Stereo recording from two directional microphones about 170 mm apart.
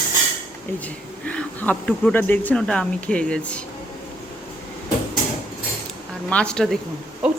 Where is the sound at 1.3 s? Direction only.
5° left (ahead or behind).